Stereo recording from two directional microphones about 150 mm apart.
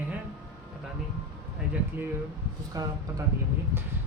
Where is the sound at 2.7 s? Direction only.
20° right (ahead or behind).